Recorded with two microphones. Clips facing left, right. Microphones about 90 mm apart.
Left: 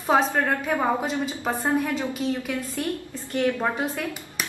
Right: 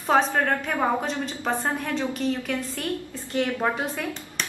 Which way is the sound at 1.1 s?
20° left (ahead or behind).